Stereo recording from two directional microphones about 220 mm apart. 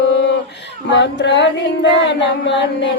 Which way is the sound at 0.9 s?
55° left (ahead or behind).